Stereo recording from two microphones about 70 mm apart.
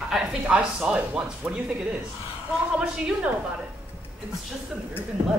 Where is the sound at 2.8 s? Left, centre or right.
Centre.